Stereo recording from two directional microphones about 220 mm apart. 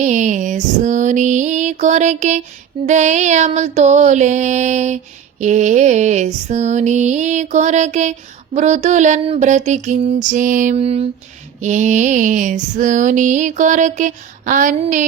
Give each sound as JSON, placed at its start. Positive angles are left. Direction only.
{"t": 0.0, "sound": "female singing", "side_deg": -35}